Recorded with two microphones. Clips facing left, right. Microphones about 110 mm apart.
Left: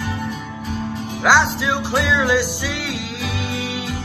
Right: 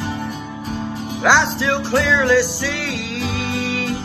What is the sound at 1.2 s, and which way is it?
Music, 5° left (ahead or behind).